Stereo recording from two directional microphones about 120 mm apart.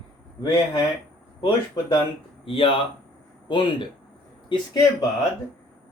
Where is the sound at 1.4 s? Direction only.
35° left (ahead or behind).